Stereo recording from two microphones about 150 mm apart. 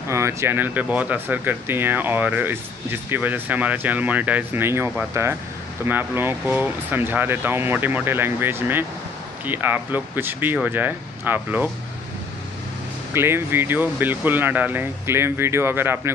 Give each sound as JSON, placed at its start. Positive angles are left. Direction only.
{"t": 0.1, "sound": "speech", "side_deg": -20}
{"t": 13.1, "sound": "speech", "side_deg": -15}